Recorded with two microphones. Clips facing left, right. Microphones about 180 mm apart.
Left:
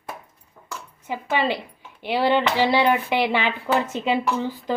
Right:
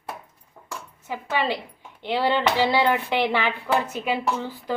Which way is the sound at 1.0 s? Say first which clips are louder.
Left 2 dB; 15° left (ahead or behind).